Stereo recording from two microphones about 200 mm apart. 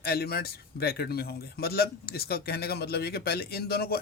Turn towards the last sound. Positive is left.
turn(degrees=50)  # may be behind; listen again after turning